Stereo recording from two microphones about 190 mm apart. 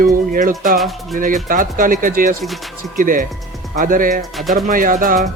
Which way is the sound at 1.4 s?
45° right (ahead or behind).